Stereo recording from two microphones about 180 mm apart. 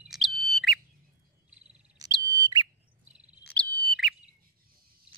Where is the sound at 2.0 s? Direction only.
20° right (ahead or behind).